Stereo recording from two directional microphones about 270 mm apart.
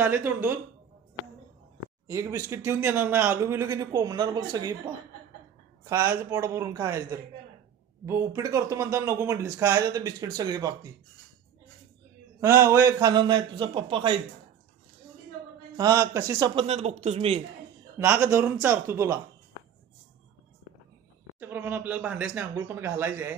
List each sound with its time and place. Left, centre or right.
0.0 s speech: centre
2.0 s speech: centre
12.4 s speech: centre
15.7 s speech: centre
17.9 s speech: centre
21.4 s speech: centre